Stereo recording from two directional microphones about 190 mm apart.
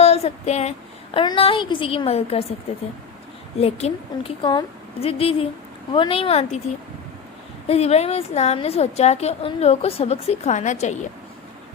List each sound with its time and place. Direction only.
0.0 s a sound: 35° left (ahead or behind)
1.1 s a woman's voice: 25° left (ahead or behind)
3.6 s a woman's voice: 35° left (ahead or behind)
7.7 s a woman's voice: 35° left (ahead or behind)